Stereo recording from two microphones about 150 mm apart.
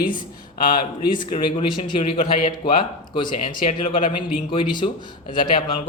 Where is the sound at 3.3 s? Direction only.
50° left (ahead or behind).